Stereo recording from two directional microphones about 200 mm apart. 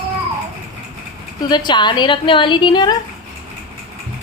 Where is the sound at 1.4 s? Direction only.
20° left (ahead or behind).